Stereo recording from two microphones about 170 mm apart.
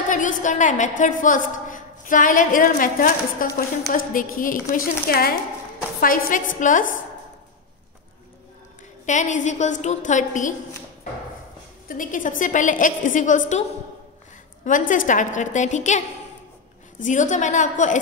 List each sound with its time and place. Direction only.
0.1 s a woman's voice: 50° left (ahead or behind)
9.0 s a woman's voice: 45° left (ahead or behind)
11.9 s a woman's voice: 50° left (ahead or behind)
14.6 s a woman's voice: 50° left (ahead or behind)
17.0 s a woman's voice: 45° left (ahead or behind)